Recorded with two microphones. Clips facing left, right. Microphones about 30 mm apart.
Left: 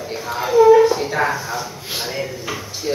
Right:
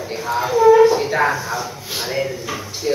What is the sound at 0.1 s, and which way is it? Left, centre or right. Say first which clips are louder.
Speech: left 1 dB; centre.